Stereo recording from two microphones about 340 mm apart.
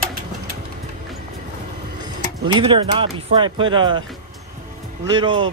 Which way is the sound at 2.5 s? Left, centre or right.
Centre.